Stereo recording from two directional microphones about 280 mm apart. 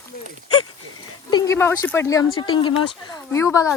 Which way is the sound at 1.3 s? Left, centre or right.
Centre.